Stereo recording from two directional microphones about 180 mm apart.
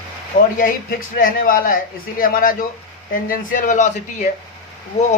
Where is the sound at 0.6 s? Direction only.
55° left (ahead or behind).